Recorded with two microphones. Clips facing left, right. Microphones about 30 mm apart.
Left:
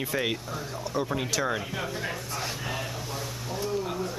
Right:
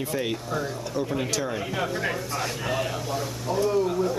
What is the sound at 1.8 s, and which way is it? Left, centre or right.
Speech, centre.